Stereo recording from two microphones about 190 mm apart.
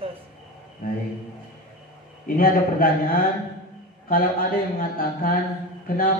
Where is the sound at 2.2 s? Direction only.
50° left (ahead or behind).